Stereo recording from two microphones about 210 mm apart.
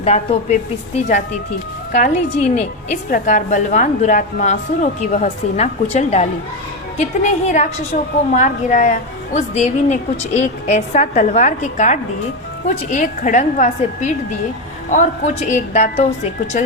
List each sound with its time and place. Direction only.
0.0 s a woman's voice: 30° left (ahead or behind)